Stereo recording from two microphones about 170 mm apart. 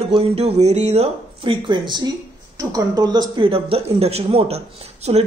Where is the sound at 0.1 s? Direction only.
35° right (ahead or behind).